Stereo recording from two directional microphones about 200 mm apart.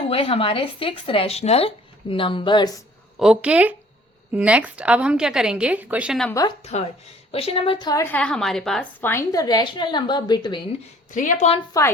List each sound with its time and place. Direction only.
0.0 s a woman's voice: 30° left (ahead or behind)
3.2 s a woman's voice: 5° right (ahead or behind)
6.6 s a woman's voice: 30° left (ahead or behind)
11.1 s a woman's voice: 40° left (ahead or behind)